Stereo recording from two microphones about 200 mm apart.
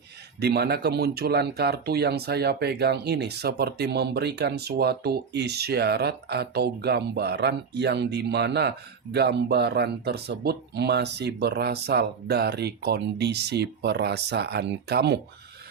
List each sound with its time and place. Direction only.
0.3 s speech: 55° right (ahead or behind)